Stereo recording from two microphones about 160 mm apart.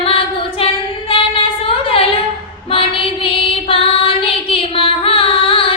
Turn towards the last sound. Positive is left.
turn(degrees=35)  # may be behind; listen again after turning